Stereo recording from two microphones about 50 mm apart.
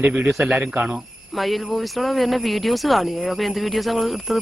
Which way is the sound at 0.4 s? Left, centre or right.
Right.